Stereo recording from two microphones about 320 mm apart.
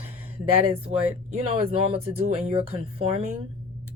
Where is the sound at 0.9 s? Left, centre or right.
Centre.